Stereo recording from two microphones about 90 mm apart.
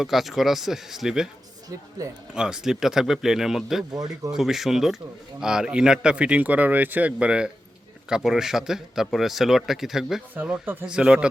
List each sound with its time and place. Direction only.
0.0 s speech: centre (ahead or behind)
2.3 s speech: 10° right (ahead or behind)
3.9 s speech: 45° right (ahead or behind)
4.3 s speech: 5° right (ahead or behind)
10.3 s speech: 20° right (ahead or behind)